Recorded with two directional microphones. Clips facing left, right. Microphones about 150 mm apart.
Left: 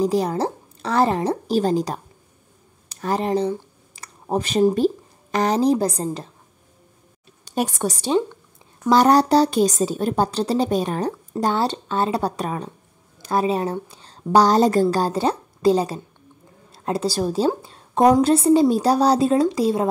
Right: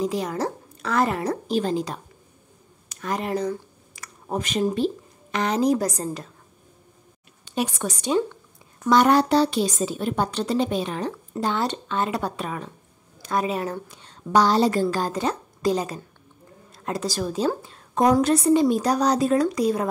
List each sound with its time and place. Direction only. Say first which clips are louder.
0.0 s a woman's voice: left 5 dB; 35° left (ahead or behind)
7.4 s a woman's voice: left 3 dB; 45° left (ahead or behind); by 19.9 s 25° left (ahead or behind)